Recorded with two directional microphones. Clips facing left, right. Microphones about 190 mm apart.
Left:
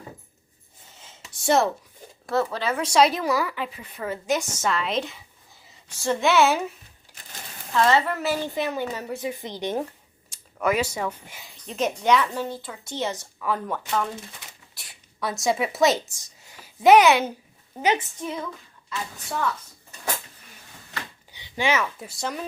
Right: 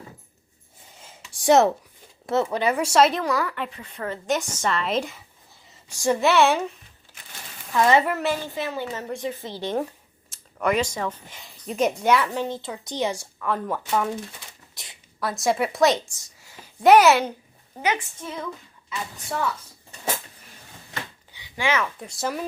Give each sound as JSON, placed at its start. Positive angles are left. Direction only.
{"t": 1.0, "sound": "a sound", "side_deg": -15}
{"t": 2.2, "sound": "speech", "side_deg": -20}
{"t": 7.1, "sound": "a sound", "side_deg": 15}
{"t": 7.7, "sound": "a woman's voice", "side_deg": -15}
{"t": 8.1, "sound": "speech", "side_deg": 0}
{"t": 8.5, "sound": "speech", "side_deg": 15}
{"t": 10.2, "sound": "speech", "side_deg": 0}
{"t": 11.6, "sound": "a woman's voice", "side_deg": -5}
{"t": 15.2, "sound": "speech", "side_deg": 0}
{"t": 17.8, "sound": "speech", "side_deg": 15}
{"t": 18.9, "sound": "speech", "side_deg": -5}
{"t": 21.3, "sound": "a sound", "side_deg": 25}
{"t": 21.7, "sound": "speech", "side_deg": 5}